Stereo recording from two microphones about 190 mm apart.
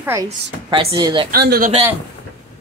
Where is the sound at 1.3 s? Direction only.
50° right (ahead or behind).